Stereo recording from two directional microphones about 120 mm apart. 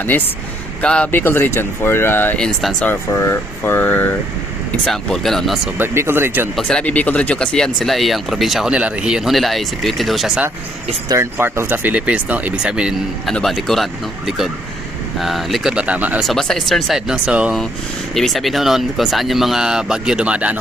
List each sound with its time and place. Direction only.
0.8 s speech: 10° left (ahead or behind)
2.4 s speech: centre (ahead or behind)
2.8 s speech: 20° left (ahead or behind)
4.9 s speech: 5° left (ahead or behind)
5.7 s speech: 20° right (ahead or behind)
6.6 s speech: 5° left (ahead or behind)
11.1 s speech: 20° right (ahead or behind)
16.2 s speech: 5° left (ahead or behind)
18.1 s speech: centre (ahead or behind)